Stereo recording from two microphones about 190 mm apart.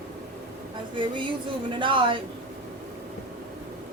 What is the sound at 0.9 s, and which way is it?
Speech, 25° right (ahead or behind).